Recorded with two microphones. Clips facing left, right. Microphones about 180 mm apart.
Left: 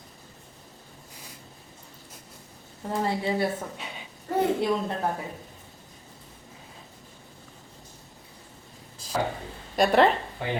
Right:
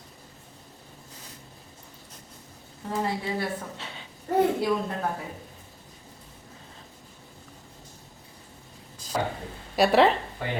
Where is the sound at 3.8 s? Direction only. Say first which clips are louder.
Left 1 dB; 15° left (ahead or behind).